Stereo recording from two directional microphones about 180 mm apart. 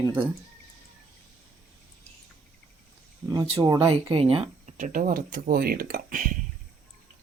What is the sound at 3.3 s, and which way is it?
Speech, 20° right (ahead or behind).